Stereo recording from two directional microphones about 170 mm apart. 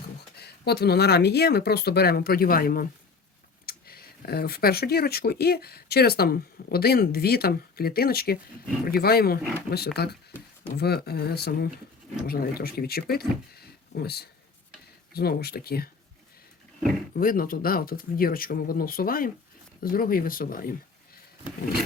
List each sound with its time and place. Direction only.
0.3 s speech: 70° left (ahead or behind)
17.2 s speech: 55° left (ahead or behind)